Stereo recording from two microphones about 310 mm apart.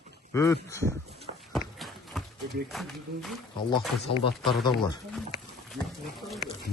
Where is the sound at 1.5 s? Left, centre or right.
Centre.